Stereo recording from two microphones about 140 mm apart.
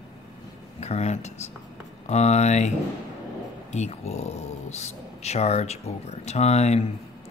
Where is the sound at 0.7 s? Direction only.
50° left (ahead or behind).